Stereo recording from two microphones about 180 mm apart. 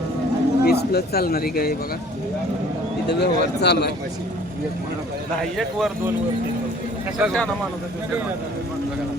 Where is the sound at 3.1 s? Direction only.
70° left (ahead or behind).